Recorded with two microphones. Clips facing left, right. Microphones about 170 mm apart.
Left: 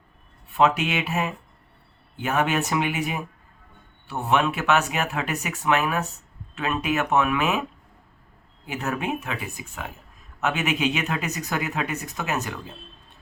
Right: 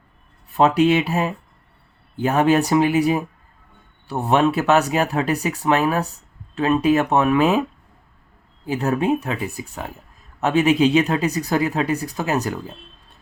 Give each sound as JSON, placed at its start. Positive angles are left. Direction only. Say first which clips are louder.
{"t": 0.5, "sound": "speech", "louder": "right 6 dB", "side_deg": -35}
{"t": 8.6, "sound": "speech", "louder": "right 8 dB", "side_deg": -30}